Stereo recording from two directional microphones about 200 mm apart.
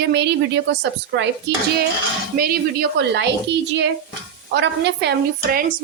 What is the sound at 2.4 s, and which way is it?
A woman's voice, 50° right (ahead or behind).